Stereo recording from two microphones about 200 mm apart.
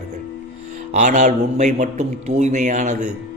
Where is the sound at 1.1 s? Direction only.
35° right (ahead or behind).